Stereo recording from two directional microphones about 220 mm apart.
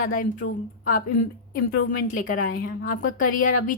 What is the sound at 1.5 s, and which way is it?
A woman's voice, 45° left (ahead or behind).